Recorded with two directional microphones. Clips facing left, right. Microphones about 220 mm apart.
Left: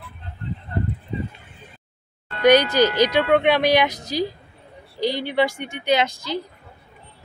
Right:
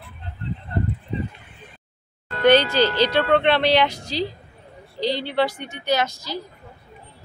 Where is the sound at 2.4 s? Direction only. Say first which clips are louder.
Left 1 dB; 15° left (ahead or behind).